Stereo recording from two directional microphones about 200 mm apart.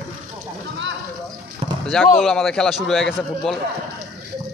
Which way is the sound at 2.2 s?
Centre (ahead or behind).